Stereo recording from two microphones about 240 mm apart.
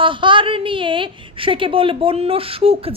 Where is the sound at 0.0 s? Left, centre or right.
Right.